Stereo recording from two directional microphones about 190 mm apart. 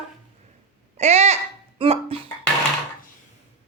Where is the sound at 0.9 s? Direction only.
35° right (ahead or behind).